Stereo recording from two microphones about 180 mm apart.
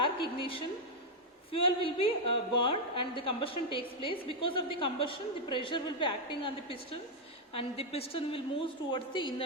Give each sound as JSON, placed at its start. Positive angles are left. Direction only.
{"t": 0.0, "sound": "a woman's voice", "side_deg": 30}